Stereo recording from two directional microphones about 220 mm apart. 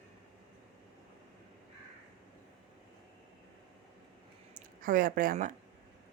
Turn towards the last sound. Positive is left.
turn(degrees=-40)  # may be behind; listen again after turning